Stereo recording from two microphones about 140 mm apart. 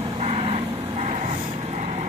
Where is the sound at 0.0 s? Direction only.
45° right (ahead or behind).